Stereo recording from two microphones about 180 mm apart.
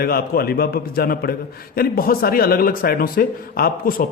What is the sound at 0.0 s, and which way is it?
A man's voice, 55° left (ahead or behind).